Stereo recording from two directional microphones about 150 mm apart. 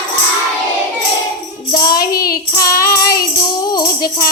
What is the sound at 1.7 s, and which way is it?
Child singing, 25° left (ahead or behind).